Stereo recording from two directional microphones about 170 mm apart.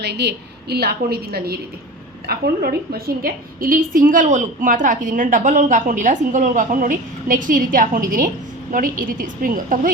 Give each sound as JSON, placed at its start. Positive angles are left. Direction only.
{"t": 0.0, "sound": "a woman's voice", "side_deg": -80}